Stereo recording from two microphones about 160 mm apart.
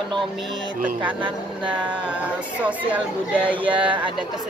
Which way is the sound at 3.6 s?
30° right (ahead or behind).